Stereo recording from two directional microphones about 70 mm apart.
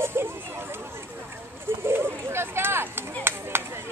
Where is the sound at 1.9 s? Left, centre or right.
Right.